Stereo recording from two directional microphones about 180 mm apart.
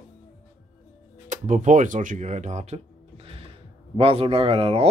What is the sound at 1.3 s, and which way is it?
Speech, 45° right (ahead or behind).